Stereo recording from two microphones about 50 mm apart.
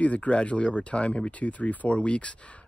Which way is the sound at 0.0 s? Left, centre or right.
Left.